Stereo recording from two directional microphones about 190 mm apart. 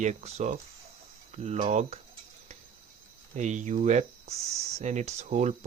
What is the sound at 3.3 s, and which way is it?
Speech, 40° right (ahead or behind).